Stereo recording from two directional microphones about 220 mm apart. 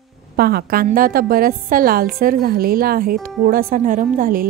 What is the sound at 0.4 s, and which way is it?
A woman's voice, 45° right (ahead or behind).